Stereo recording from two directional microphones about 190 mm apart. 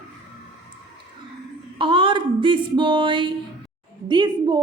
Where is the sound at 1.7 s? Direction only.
25° right (ahead or behind).